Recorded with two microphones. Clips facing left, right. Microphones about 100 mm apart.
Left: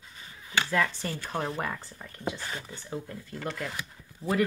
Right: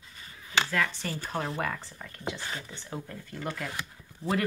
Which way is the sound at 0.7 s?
30° left (ahead or behind).